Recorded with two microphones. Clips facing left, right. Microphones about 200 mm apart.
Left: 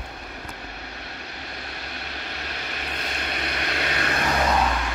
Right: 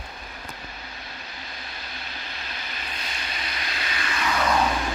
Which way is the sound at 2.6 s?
65° left (ahead or behind).